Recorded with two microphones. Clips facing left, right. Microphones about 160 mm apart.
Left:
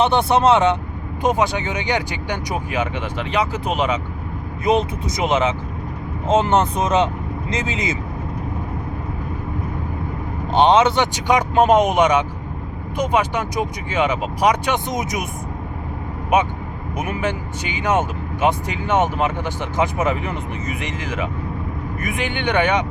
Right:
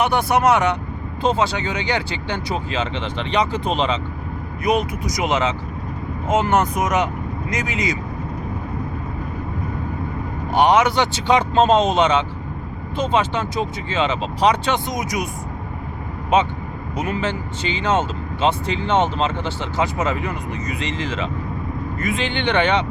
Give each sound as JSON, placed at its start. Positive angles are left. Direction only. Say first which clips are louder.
{"t": 0.0, "sound": "speech", "louder": "left 2 dB", "side_deg": 25}
{"t": 4.6, "sound": "speech", "louder": "left 2 dB", "side_deg": 25}
{"t": 10.5, "sound": "speech", "louder": "left 1 dB", "side_deg": 25}
{"t": 16.3, "sound": "speech", "louder": "even", "side_deg": 15}